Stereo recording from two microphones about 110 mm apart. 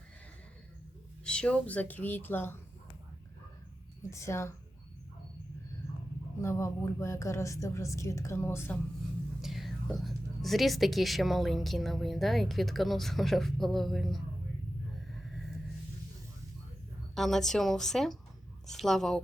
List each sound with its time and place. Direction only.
1.2 s speech: 10° left (ahead or behind)
4.1 s a woman's voice: 25° left (ahead or behind)
6.4 s a woman's voice: 25° left (ahead or behind)
9.4 s speech: centre (ahead or behind)
17.2 s speech: centre (ahead or behind)